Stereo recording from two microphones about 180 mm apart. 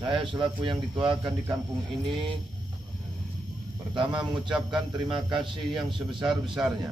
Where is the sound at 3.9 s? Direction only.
25° right (ahead or behind).